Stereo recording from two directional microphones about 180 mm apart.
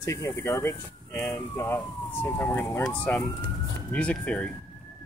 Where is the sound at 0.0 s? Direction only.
15° left (ahead or behind).